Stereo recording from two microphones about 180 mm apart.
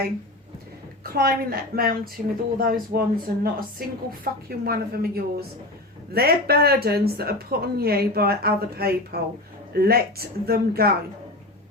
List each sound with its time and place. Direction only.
1.0 s a woman's voice: 55° right (ahead or behind)